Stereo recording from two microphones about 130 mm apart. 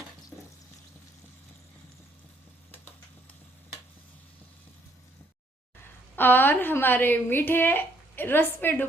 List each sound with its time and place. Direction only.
6.1 s a woman's voice: 15° left (ahead or behind)